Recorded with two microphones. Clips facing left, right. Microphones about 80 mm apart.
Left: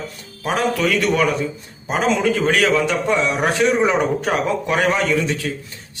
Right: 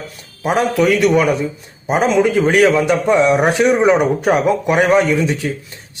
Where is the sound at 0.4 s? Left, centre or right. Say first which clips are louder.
Right 5 dB; right.